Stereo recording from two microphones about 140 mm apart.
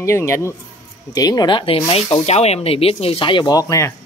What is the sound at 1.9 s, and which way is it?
Speech, 50° left (ahead or behind).